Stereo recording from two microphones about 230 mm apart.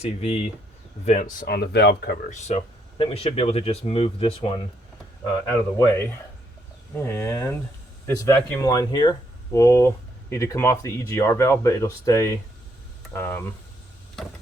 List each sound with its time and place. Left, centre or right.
0.0 s speech: left
2.3 s speech: left; by 13.5 s centre